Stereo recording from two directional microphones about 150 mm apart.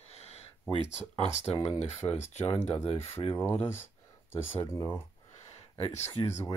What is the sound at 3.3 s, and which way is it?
Speech, 15° left (ahead or behind).